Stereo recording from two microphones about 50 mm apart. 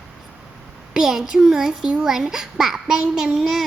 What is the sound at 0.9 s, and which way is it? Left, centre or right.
A child's voice, centre.